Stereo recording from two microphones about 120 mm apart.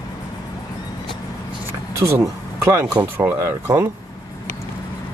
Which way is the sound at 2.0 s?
20° right (ahead or behind).